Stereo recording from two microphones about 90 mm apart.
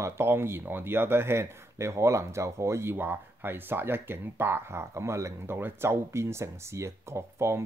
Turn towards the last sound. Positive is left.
turn(degrees=-30)  # may be behind; listen again after turning